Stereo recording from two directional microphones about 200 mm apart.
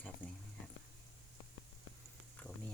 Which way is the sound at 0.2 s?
10° left (ahead or behind).